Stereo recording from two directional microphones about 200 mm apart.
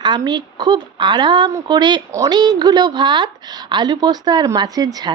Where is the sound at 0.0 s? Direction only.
20° right (ahead or behind).